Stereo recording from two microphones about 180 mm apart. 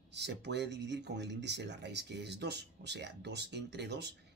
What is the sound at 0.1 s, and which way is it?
Speech, 75° right (ahead or behind).